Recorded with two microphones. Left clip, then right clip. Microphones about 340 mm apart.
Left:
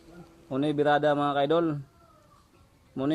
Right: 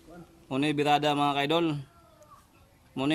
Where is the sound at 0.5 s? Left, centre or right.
Centre.